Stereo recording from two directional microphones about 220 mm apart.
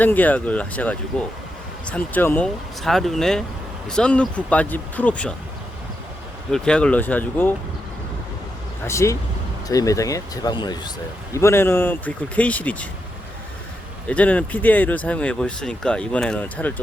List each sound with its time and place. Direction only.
0.0 s speech: 10° left (ahead or behind)
6.5 s speech: 5° left (ahead or behind)
8.8 s speech: 15° left (ahead or behind)
14.1 s speech: 5° left (ahead or behind)